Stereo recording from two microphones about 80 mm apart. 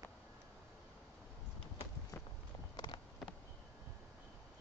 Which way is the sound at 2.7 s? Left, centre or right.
Left.